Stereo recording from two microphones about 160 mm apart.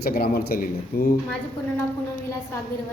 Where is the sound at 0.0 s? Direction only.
70° left (ahead or behind).